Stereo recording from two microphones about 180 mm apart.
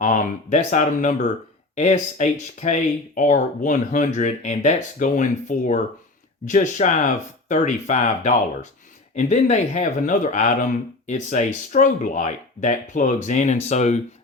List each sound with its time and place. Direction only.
0.0 s speech: 45° left (ahead or behind)